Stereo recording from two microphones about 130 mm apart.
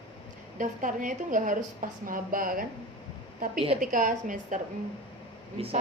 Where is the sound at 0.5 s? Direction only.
90° right.